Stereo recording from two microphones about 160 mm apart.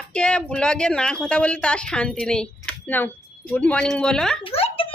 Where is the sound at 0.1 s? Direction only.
5° left (ahead or behind).